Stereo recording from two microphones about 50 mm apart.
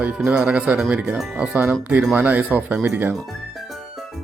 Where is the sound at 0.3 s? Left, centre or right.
Centre.